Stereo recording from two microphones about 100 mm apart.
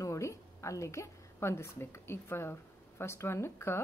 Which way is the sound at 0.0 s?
30° left (ahead or behind).